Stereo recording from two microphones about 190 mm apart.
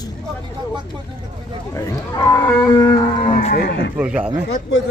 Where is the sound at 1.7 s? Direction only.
15° left (ahead or behind).